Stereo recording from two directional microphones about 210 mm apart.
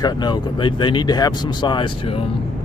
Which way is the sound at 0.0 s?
20° left (ahead or behind).